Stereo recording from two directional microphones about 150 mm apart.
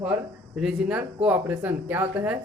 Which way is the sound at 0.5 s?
5° right (ahead or behind).